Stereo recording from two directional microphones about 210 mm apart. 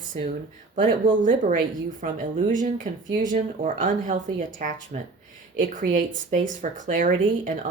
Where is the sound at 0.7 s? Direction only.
40° right (ahead or behind).